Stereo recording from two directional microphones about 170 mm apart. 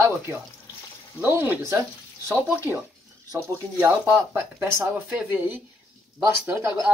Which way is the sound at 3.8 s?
15° right (ahead or behind).